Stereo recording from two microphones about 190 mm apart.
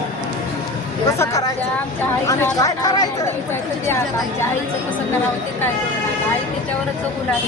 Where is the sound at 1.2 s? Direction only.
20° left (ahead or behind).